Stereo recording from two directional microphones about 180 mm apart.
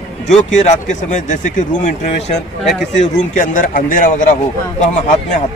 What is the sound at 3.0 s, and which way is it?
A man's voice, 45° left (ahead or behind).